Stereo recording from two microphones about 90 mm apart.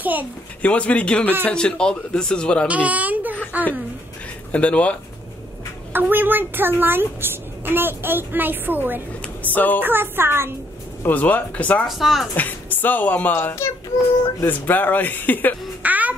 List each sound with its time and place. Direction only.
0.0 s a woman's voice: 20° right (ahead or behind)
0.6 s a man's voice: 15° left (ahead or behind)
2.7 s a child's voice: 15° right (ahead or behind)
4.5 s a man's voice: 15° left (ahead or behind)
5.9 s a woman's voice: 20° right (ahead or behind)
9.2 s a sound: 20° left (ahead or behind)
9.8 s a woman's voice: 25° right (ahead or behind)
11.0 s a man's voice: 20° left (ahead or behind)
11.9 s speech: centre (ahead or behind)
12.4 s speech: 20° left (ahead or behind)
15.8 s a sound: 15° right (ahead or behind)